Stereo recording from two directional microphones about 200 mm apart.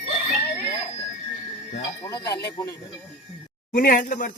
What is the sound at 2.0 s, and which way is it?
Speech, 20° left (ahead or behind).